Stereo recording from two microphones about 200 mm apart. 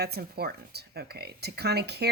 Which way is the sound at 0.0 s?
50° right (ahead or behind).